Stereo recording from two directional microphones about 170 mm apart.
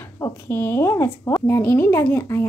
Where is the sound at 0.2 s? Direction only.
15° left (ahead or behind).